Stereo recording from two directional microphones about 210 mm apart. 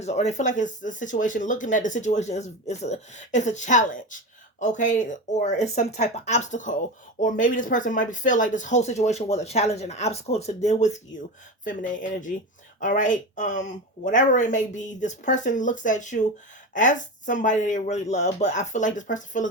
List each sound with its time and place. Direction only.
0.0 s speech: 35° left (ahead or behind)